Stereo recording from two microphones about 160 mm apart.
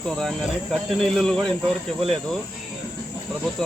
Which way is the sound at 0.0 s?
5° left (ahead or behind).